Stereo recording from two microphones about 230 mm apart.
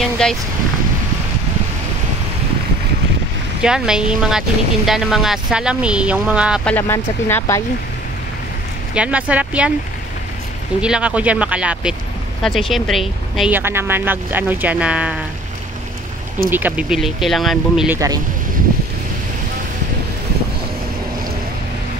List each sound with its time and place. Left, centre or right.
0.0 s speech: centre
3.6 s speech: centre
8.9 s speech: centre
10.8 s speech: centre
16.4 s speech: centre